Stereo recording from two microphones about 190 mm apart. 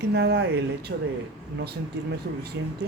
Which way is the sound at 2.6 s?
75° right (ahead or behind).